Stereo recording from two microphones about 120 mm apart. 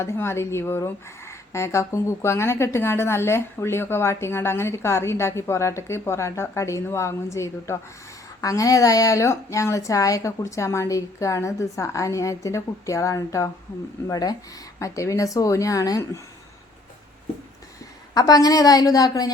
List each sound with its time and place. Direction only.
0.0 s a woman's voice: 20° left (ahead or behind)
18.1 s a woman's voice: 30° left (ahead or behind)